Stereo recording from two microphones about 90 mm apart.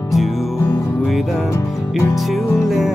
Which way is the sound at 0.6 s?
35° left (ahead or behind).